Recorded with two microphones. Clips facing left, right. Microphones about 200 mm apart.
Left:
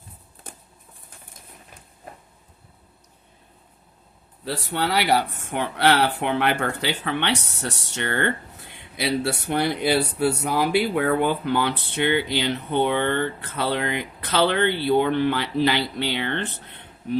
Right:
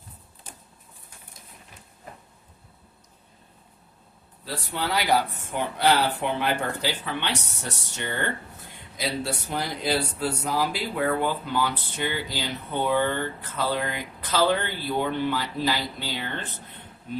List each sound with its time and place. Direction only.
4.4 s speech: 70° left (ahead or behind)